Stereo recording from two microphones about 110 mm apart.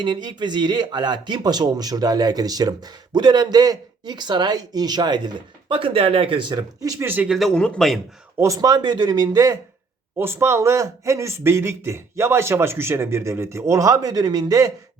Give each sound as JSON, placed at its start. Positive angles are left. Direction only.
{"t": 0.0, "sound": "speech", "side_deg": -45}
{"t": 7.0, "sound": "speech", "side_deg": -20}
{"t": 7.3, "sound": "speech", "side_deg": 0}
{"t": 8.4, "sound": "speech", "side_deg": -30}
{"t": 10.2, "sound": "speech", "side_deg": -20}